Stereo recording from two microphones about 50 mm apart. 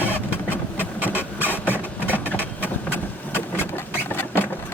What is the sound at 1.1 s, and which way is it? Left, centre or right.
Printer, left.